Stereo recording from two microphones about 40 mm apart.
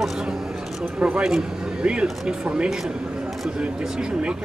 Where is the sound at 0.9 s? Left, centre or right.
Centre.